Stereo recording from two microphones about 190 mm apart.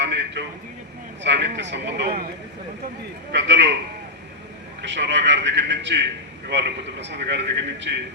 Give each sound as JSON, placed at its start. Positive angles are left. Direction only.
{"t": 0.0, "sound": "a man's voice", "side_deg": -65}
{"t": 3.3, "sound": "speech", "side_deg": -65}
{"t": 4.9, "sound": "a man's voice", "side_deg": -65}